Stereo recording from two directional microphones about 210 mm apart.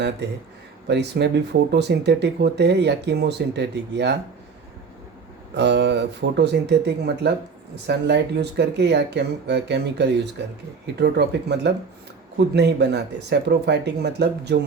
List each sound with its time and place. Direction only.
0.9 s speech: 55° right (ahead or behind)
5.5 s speech: 55° right (ahead or behind)